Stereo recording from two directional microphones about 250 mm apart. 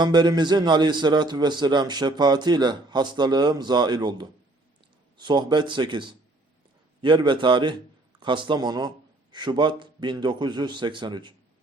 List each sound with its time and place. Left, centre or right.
0.0 s a man's voice: centre